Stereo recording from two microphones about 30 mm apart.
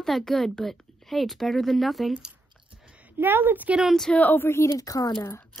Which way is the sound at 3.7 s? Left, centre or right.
Right.